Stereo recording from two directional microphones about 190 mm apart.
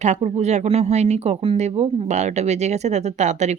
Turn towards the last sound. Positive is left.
turn(degrees=-40)  # may be behind; listen again after turning